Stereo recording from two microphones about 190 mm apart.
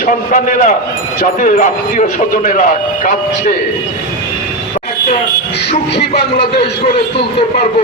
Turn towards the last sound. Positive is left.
turn(degrees=60)  # may be behind; listen again after turning